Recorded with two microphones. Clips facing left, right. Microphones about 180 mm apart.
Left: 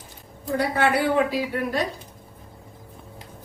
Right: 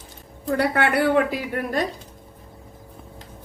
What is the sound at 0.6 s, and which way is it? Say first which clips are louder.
Speech: right 1 dB; 60° right (ahead or behind).